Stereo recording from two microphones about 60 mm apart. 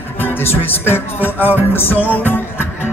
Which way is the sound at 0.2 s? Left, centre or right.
Left.